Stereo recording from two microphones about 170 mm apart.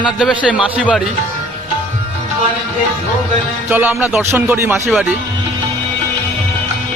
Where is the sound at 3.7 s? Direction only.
10° right (ahead or behind).